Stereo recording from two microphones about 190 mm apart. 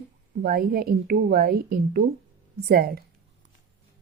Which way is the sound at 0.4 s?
50° right (ahead or behind).